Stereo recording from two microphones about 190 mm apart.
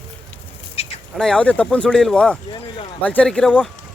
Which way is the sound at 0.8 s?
30° left (ahead or behind).